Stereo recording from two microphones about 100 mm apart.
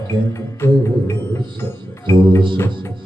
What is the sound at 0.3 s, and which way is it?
Music, 30° left (ahead or behind).